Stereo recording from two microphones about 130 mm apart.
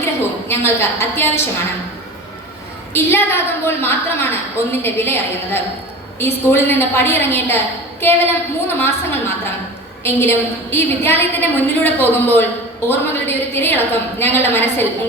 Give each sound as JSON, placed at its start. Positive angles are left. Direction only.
{"t": 0.0, "sound": "a woman's voice", "side_deg": 20}
{"t": 2.9, "sound": "a woman's voice", "side_deg": 20}
{"t": 10.0, "sound": "a woman's voice", "side_deg": 20}